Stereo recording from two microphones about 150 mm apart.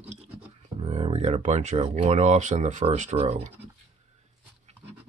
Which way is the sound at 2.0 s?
50° right (ahead or behind).